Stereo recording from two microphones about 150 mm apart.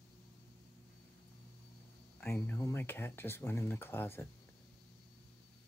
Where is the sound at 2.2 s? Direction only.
15° left (ahead or behind).